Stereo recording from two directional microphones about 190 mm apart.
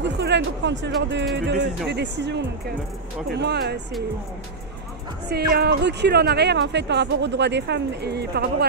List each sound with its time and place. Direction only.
0.0 s speech: 65° right (ahead or behind)
5.3 s speech: 55° right (ahead or behind)